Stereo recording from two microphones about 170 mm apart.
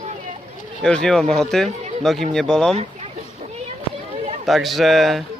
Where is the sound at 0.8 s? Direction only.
5° left (ahead or behind).